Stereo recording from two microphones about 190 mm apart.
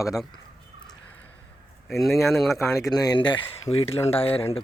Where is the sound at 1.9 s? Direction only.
Centre (ahead or behind).